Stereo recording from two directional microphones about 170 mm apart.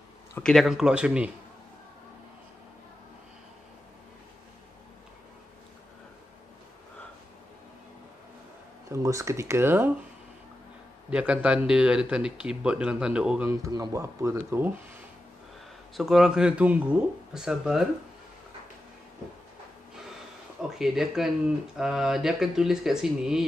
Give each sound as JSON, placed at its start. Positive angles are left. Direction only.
{"t": 0.4, "sound": "speech", "side_deg": 0}
{"t": 8.9, "sound": "speech", "side_deg": -15}
{"t": 11.1, "sound": "speech", "side_deg": -5}
{"t": 16.0, "sound": "speech", "side_deg": 0}
{"t": 20.7, "sound": "speech", "side_deg": 0}